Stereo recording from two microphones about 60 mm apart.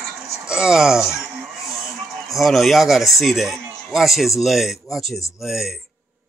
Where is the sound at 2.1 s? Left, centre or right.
Centre.